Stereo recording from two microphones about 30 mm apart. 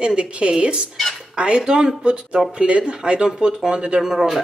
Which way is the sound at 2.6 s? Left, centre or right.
Right.